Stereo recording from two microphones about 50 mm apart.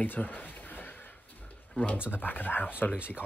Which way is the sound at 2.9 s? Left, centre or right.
Right.